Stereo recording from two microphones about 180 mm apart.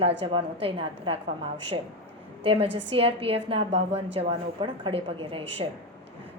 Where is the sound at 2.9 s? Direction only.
30° right (ahead or behind).